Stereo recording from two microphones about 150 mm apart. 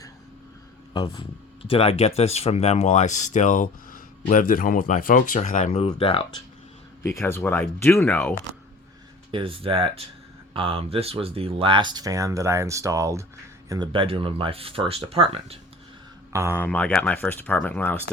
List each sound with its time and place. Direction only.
1.0 s speech: 35° left (ahead or behind)
7.0 s speech: 15° left (ahead or behind)
9.3 s speech: 35° right (ahead or behind); by 13.2 s 20° right (ahead or behind)
13.7 s speech: 30° right (ahead or behind)
16.3 s speech: 20° right (ahead or behind)
16.6 s speech: 10° left (ahead or behind)